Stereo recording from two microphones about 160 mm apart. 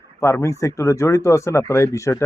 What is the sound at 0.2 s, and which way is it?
Speech, 15° left (ahead or behind).